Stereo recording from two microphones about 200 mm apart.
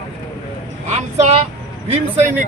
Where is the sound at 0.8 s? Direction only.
35° right (ahead or behind).